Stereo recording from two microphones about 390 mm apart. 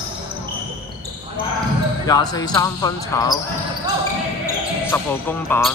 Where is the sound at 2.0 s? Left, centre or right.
Centre.